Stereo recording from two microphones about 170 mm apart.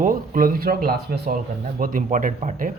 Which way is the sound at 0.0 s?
55° right (ahead or behind).